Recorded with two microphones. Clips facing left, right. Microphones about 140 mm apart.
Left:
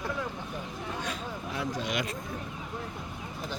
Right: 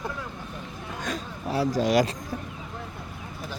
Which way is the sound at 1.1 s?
30° right (ahead or behind).